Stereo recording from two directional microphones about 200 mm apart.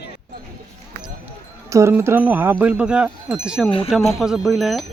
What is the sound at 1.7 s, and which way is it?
Wind chime, 15° right (ahead or behind).